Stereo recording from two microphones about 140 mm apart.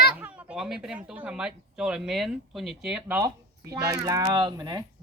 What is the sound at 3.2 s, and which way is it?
Speech, 25° right (ahead or behind).